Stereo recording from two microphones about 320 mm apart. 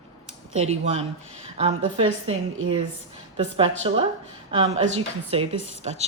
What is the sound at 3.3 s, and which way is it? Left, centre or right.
A woman's voice, centre.